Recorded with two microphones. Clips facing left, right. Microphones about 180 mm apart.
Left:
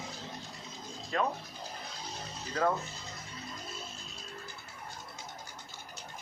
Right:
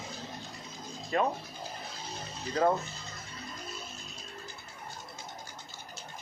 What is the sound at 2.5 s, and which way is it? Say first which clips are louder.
Speech: right 3 dB; 15° right (ahead or behind).